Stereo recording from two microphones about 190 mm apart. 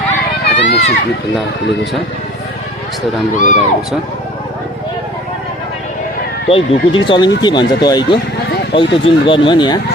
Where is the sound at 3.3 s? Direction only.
40° left (ahead or behind).